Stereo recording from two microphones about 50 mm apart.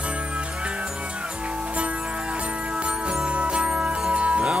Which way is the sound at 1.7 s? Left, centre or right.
Right.